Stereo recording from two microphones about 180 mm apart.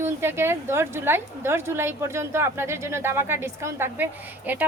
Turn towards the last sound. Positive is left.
turn(degrees=-10)  # may be behind; listen again after turning